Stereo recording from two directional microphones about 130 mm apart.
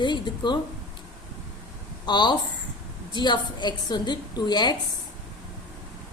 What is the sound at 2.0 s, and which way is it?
A woman's voice, 35° left (ahead or behind).